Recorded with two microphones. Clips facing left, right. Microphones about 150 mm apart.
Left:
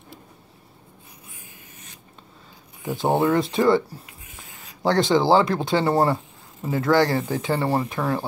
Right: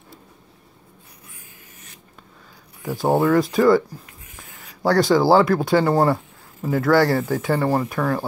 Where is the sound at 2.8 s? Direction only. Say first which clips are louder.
Right 2 dB; 20° left (ahead or behind).